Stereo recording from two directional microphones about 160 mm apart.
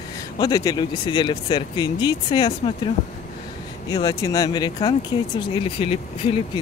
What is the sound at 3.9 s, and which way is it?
Speech, 20° left (ahead or behind).